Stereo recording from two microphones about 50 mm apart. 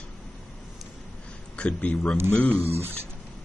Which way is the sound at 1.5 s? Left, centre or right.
Left.